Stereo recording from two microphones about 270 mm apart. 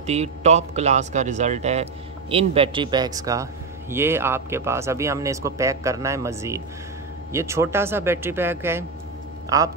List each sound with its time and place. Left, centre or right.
0.0 s a man's voice: right